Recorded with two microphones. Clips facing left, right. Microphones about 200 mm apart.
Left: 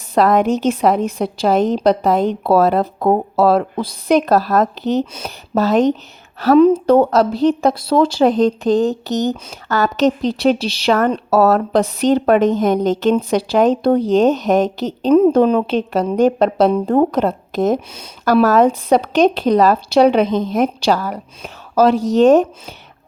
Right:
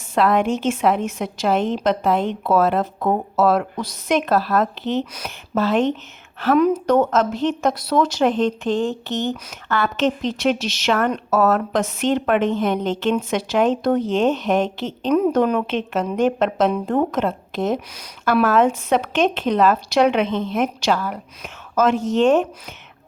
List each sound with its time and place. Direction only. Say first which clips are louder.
0.1 s a woman's voice: left 4 dB; 40° left (ahead or behind)
17.7 s speech: left 4 dB; 25° left (ahead or behind)
18.3 s a woman's voice: left 4 dB; 40° left (ahead or behind)